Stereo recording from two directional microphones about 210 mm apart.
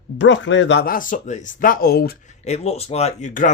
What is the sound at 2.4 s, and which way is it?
Speech, 30° left (ahead or behind).